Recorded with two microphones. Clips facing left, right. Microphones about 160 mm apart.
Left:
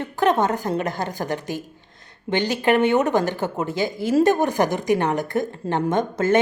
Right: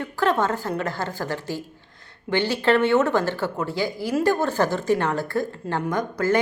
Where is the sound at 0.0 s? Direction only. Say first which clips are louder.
Left 2 dB; 20° left (ahead or behind).